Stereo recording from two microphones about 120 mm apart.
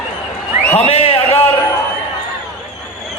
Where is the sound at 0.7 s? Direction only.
60° left (ahead or behind).